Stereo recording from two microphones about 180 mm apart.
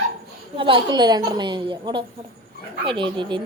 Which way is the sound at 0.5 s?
30° right (ahead or behind).